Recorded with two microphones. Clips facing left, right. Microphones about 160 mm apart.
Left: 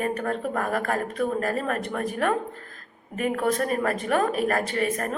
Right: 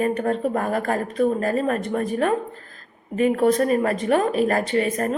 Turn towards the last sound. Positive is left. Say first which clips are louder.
# right 5 dB
turn(degrees=-30)  # may be behind; listen again after turning